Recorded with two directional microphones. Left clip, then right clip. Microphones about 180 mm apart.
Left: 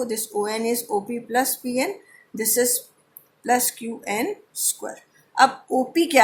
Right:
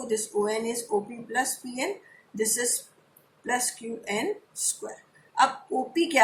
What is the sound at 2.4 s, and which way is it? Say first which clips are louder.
Speech: left 6 dB; 50° left (ahead or behind).